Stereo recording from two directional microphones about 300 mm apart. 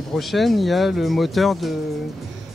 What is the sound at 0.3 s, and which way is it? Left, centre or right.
Speech, centre.